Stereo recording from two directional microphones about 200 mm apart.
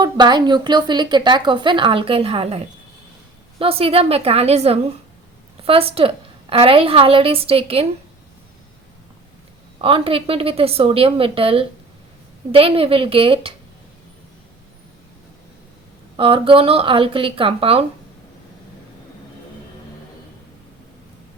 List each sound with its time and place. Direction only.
0.0 s a woman's voice: 20° right (ahead or behind)
3.6 s a woman's voice: 30° right (ahead or behind)
9.7 s a woman's voice: 25° right (ahead or behind)
16.1 s a woman's voice: 25° right (ahead or behind)